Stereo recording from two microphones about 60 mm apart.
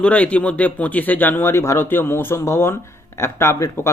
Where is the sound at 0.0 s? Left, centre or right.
Left.